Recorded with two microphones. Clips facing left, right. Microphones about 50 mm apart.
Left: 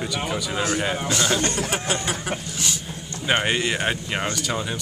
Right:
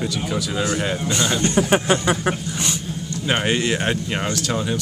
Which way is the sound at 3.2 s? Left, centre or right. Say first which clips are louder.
Right 1 dB; centre.